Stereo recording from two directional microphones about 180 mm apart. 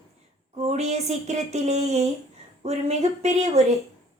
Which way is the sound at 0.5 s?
35° right (ahead or behind).